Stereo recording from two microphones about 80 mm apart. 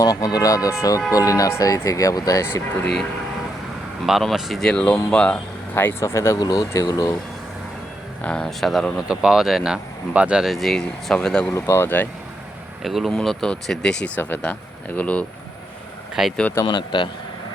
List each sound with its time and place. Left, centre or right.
0.0 s speech: left
2.7 s speech: centre
4.7 s speech: centre
5.7 s speech: left
6.3 s speech: left
8.2 s speech: centre
8.4 s speech: centre
9.0 s speech: centre
10.4 s speech: centre
11.5 s speech: left
12.8 s speech: centre
16.2 s speech: centre
16.6 s speech: left